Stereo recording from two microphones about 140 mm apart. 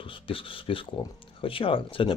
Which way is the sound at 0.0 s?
40° left (ahead or behind).